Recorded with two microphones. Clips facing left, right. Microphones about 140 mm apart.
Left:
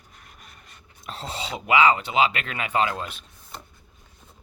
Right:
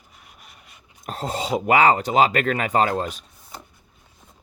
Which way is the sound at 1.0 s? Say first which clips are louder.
Right 6 dB; 45° right (ahead or behind).